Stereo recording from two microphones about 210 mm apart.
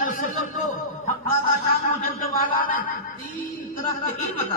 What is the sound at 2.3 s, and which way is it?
A woman's voice, 40° left (ahead or behind).